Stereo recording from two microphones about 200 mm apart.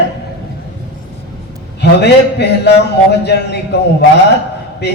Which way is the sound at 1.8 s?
55° left (ahead or behind).